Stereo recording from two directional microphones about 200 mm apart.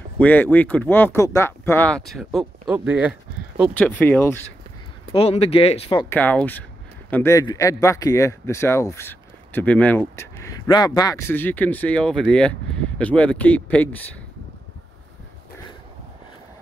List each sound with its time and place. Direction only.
0.2 s a man's voice: 10° left (ahead or behind)
3.7 s a man's voice: 10° left (ahead or behind)
5.1 s speech: 30° left (ahead or behind)
6.0 s a man's voice: 10° left (ahead or behind)